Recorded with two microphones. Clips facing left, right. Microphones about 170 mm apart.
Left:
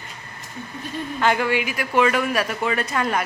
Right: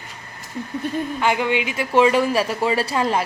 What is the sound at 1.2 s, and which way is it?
Speech, 15° right (ahead or behind).